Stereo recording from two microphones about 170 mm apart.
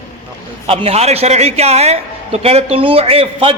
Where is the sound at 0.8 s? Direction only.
35° right (ahead or behind).